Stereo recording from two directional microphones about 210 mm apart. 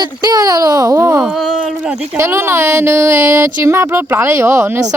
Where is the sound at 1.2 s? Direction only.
Centre (ahead or behind).